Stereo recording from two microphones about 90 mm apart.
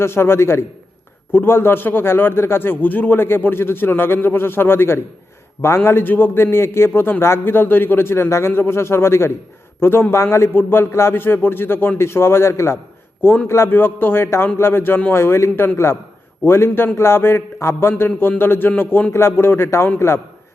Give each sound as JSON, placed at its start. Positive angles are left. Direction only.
{"t": 0.0, "sound": "a man's voice", "side_deg": 25}